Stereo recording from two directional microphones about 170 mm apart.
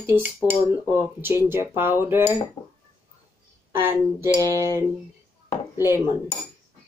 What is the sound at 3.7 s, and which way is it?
Speech, 15° right (ahead or behind).